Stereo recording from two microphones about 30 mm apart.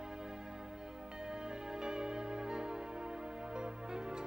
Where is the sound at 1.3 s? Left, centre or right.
Right.